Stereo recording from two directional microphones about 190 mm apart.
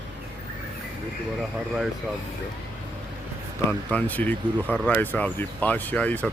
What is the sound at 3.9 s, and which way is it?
Speech, 10° left (ahead or behind).